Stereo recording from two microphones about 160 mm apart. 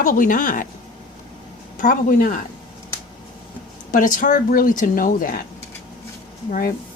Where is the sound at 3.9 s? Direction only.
55° left (ahead or behind).